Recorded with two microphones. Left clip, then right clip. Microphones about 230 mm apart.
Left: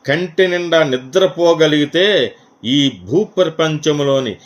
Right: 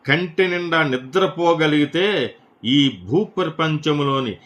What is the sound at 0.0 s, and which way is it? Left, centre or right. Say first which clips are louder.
Speech: left 4 dB; centre.